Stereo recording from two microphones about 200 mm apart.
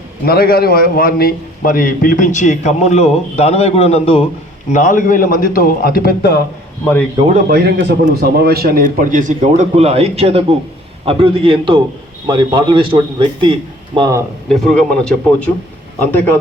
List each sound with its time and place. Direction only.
0.3 s a man's voice: 50° left (ahead or behind); by 4.3 s 30° left (ahead or behind)
4.7 s a man's voice: 40° left (ahead or behind)
7.3 s a man's voice: 45° right (ahead or behind); by 14.2 s 25° right (ahead or behind)
14.5 s speech: centre (ahead or behind)